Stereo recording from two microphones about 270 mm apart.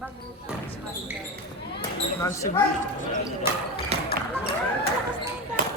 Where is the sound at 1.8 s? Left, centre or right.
Centre.